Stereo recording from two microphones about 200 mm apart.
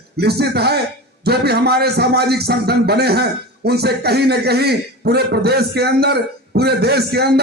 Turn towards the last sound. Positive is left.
turn(degrees=-55)  # may be behind; listen again after turning